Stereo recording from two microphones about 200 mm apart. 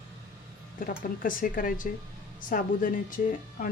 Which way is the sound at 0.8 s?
45° left (ahead or behind).